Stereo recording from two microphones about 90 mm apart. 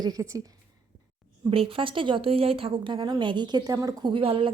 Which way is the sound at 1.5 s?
85° right.